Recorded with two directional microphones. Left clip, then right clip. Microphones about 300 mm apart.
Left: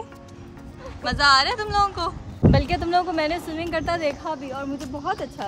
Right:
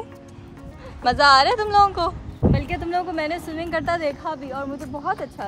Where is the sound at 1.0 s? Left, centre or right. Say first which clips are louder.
Right 3 dB; centre.